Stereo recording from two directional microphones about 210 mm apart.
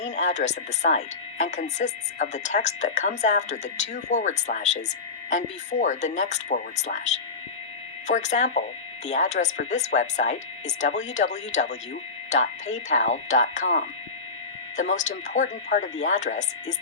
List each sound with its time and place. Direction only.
0.0 s speech: 35° left (ahead or behind)